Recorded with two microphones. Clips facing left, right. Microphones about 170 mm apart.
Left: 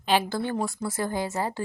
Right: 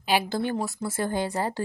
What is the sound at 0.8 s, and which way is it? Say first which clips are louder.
Speech: right 1 dB; 25° right (ahead or behind).